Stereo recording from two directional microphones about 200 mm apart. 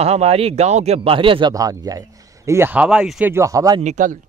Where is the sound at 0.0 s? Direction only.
30° right (ahead or behind).